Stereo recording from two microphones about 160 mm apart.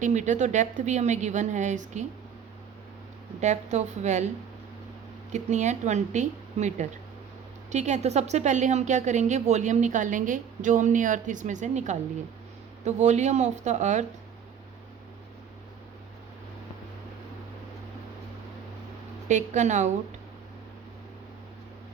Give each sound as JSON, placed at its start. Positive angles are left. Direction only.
{"t": 0.0, "sound": "a woman's voice", "side_deg": -50}
{"t": 3.4, "sound": "a woman's voice", "side_deg": -45}
{"t": 5.3, "sound": "a woman's voice", "side_deg": -45}
{"t": 19.3, "sound": "a woman's voice", "side_deg": -50}